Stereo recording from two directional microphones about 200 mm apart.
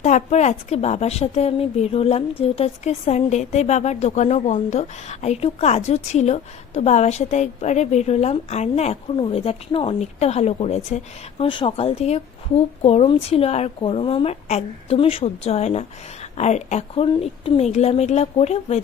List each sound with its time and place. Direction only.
0.0 s speech: 35° left (ahead or behind)